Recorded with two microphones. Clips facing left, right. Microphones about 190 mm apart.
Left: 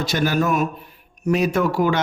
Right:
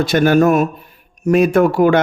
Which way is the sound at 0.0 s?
55° right (ahead or behind).